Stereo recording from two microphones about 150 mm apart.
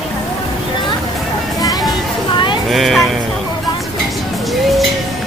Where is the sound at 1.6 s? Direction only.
25° left (ahead or behind).